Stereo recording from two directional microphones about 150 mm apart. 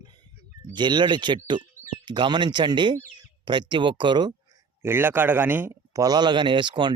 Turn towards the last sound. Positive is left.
turn(degrees=-30)  # may be behind; listen again after turning